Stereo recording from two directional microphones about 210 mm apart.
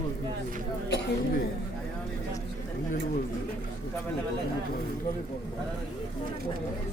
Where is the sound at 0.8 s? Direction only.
55° left (ahead or behind).